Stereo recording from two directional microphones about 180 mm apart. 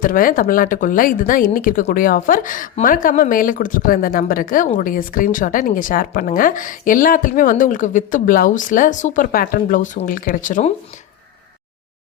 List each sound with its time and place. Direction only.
0.0 s speech: 50° left (ahead or behind)